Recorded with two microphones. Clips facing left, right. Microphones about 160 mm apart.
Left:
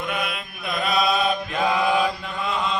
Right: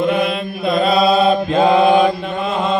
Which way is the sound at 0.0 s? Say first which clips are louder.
Right 11 dB; 30° right (ahead or behind).